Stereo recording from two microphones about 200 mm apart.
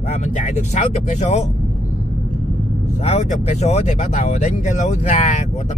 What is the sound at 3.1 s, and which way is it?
Speech, 35° left (ahead or behind).